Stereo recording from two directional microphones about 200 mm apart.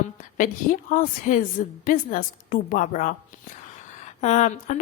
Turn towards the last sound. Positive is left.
turn(degrees=35)  # may be behind; listen again after turning